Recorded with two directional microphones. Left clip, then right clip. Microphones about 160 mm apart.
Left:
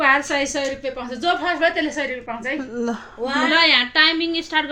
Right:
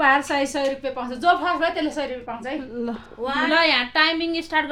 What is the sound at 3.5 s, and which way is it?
A woman's voice, 45° right (ahead or behind).